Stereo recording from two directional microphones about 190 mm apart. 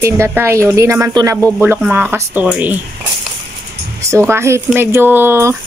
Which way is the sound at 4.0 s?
15° right (ahead or behind).